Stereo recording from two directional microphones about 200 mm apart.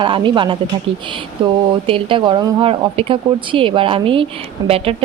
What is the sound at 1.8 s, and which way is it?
A woman's voice, 25° right (ahead or behind).